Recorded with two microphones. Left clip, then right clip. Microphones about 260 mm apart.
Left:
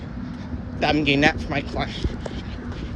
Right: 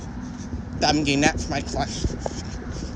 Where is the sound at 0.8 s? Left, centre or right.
Right.